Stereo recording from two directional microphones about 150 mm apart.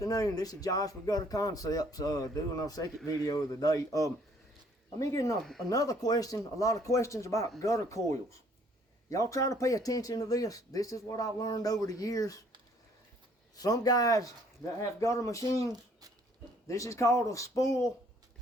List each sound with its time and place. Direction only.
0.0 s speech: 25° left (ahead or behind)
5.4 s speech: centre (ahead or behind)
5.6 s speech: 25° left (ahead or behind)
13.6 s speech: 25° left (ahead or behind)
16.6 s speech: 20° left (ahead or behind)